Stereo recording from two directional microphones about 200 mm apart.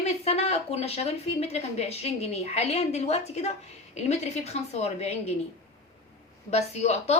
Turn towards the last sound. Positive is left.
turn(degrees=35)  # may be behind; listen again after turning